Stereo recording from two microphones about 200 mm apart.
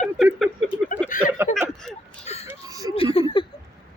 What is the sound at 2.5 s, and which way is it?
Speech, 15° right (ahead or behind).